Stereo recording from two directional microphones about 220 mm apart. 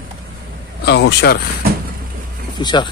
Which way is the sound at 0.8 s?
50° left (ahead or behind).